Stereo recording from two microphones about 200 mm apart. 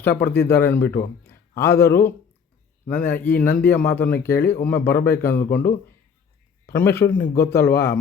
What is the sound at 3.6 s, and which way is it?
A man's voice, 10° left (ahead or behind).